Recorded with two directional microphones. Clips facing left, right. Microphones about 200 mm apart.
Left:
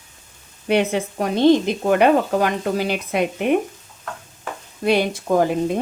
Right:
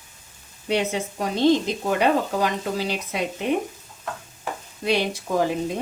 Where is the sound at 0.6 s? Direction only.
60° left (ahead or behind).